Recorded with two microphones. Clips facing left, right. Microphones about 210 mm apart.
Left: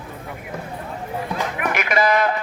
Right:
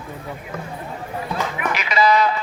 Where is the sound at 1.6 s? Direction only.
50° left (ahead or behind).